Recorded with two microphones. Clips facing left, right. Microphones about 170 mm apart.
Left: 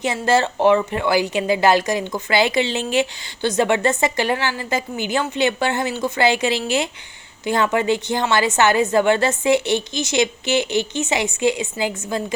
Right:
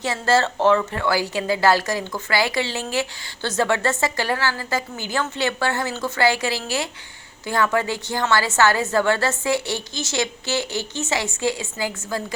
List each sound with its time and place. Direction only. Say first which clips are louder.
0.0 s speech: left 2 dB; 20° left (ahead or behind)